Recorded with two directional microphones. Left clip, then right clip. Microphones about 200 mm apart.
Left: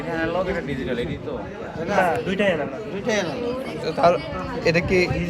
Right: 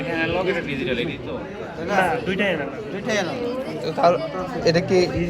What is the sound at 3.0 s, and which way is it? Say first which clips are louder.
Speech: even; 60° left (ahead or behind).